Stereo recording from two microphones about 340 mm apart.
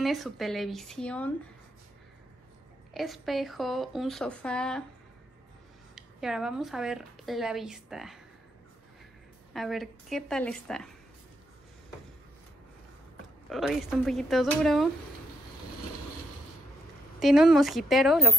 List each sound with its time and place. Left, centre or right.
0.0 s speech: centre
2.9 s speech: centre
5.9 s speech: centre
9.5 s speech: centre
13.5 s speech: centre
17.2 s speech: centre